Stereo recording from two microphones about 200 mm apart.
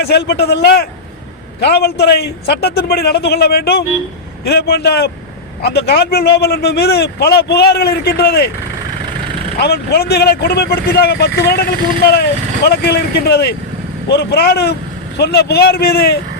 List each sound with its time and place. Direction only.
0.0 s a man's voice: 55° left (ahead or behind)
9.6 s a man's voice: 50° left (ahead or behind)